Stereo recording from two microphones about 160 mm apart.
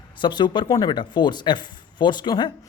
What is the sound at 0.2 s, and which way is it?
Speech, 30° left (ahead or behind).